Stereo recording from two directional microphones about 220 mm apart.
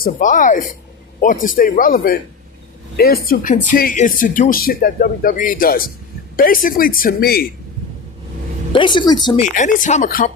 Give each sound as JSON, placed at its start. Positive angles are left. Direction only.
{"t": 0.0, "sound": "speech", "side_deg": 35}
{"t": 8.7, "sound": "a woman's voice", "side_deg": 20}
{"t": 9.6, "sound": "speech", "side_deg": 35}